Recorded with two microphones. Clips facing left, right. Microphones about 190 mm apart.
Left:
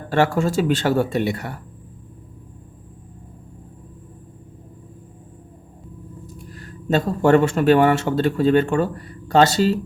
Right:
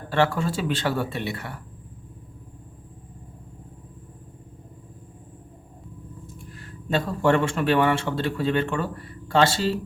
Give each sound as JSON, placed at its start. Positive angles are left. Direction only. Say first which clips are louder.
{"t": 0.1, "sound": "speech", "louder": "left 4 dB", "side_deg": 45}
{"t": 6.2, "sound": "speech", "louder": "left 4 dB", "side_deg": 40}